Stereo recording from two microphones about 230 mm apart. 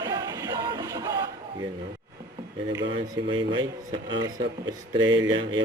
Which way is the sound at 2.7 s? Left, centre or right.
Centre.